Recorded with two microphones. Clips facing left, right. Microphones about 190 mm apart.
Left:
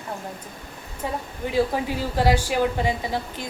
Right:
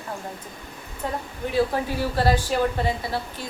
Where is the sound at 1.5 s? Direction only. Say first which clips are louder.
Even; 15° left (ahead or behind).